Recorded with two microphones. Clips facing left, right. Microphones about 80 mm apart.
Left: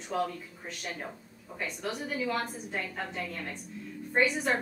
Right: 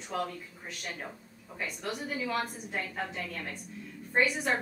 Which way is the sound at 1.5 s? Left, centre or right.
Centre.